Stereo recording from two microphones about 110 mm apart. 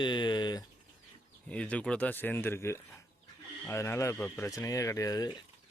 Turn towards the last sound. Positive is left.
turn(degrees=35)  # may be behind; listen again after turning